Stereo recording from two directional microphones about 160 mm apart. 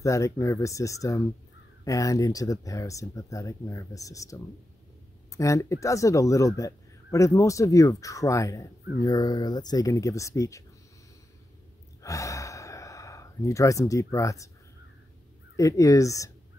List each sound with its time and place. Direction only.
0.0 s speech: 20° left (ahead or behind)
12.0 s gasp: 20° left (ahead or behind)
15.5 s speech: 20° left (ahead or behind)